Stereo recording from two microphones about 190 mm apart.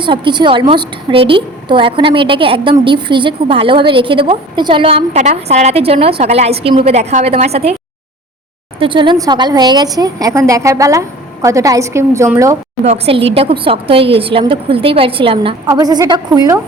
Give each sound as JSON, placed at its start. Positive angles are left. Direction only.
{"t": 0.0, "sound": "a woman's voice", "side_deg": -25}
{"t": 8.8, "sound": "a woman's voice", "side_deg": -25}
{"t": 12.8, "sound": "a woman's voice", "side_deg": -30}